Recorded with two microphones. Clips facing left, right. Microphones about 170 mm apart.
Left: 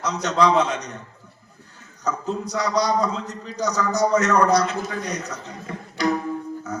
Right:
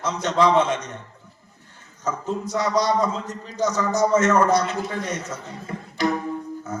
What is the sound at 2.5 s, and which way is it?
A man's voice, 35° left (ahead or behind).